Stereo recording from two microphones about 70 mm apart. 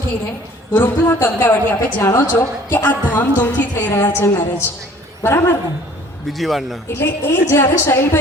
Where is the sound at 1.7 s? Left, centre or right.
Left.